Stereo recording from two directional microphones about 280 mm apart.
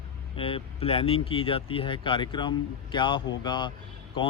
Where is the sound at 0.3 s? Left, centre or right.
Centre.